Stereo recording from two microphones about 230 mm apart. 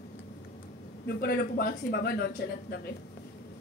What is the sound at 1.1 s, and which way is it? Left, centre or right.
Speech, left.